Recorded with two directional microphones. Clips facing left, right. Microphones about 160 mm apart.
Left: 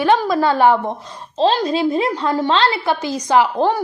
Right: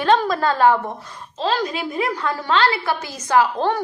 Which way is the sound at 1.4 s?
30° left (ahead or behind).